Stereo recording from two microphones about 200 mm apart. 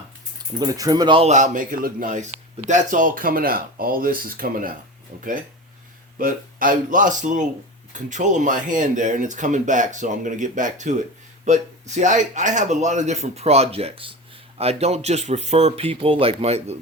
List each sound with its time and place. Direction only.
0.6 s speech: 20° right (ahead or behind); by 4.7 s 45° right (ahead or behind)
6.1 s speech: 45° right (ahead or behind)